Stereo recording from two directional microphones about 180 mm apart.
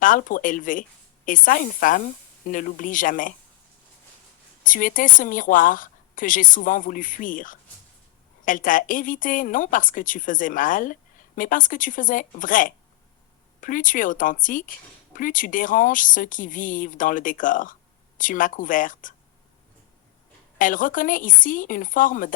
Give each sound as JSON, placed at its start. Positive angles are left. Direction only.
{"t": 0.0, "sound": "speech", "side_deg": 50}
{"t": 4.6, "sound": "speech", "side_deg": 50}
{"t": 20.6, "sound": "speech", "side_deg": 50}